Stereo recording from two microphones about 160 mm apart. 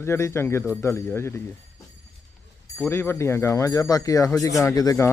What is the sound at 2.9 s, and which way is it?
Speech, 15° left (ahead or behind).